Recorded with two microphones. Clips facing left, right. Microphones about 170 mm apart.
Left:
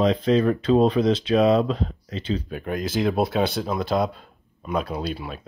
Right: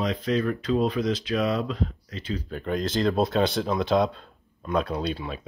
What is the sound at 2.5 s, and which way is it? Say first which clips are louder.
Speech: left 1 dB; 10° left (ahead or behind).